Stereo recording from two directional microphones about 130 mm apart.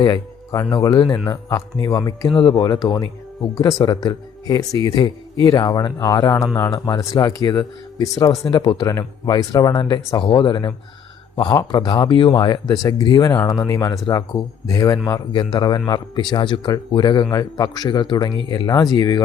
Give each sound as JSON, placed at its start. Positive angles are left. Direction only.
{"t": 0.0, "sound": "speech", "side_deg": 35}
{"t": 8.4, "sound": "speech", "side_deg": 35}
{"t": 8.9, "sound": "speech", "side_deg": 25}